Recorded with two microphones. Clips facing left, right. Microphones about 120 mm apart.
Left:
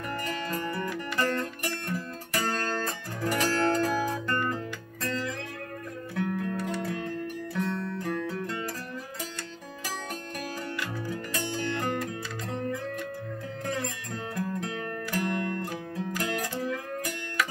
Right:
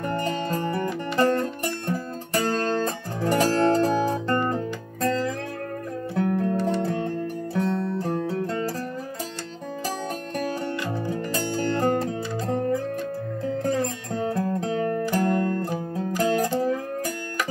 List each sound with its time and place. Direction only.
0.0 s music: 30° right (ahead or behind)
1.2 s music: 35° right (ahead or behind)
9.8 s music: 30° right (ahead or behind)